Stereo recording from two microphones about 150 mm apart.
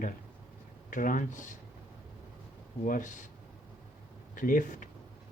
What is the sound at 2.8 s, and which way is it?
Speech, 65° left (ahead or behind).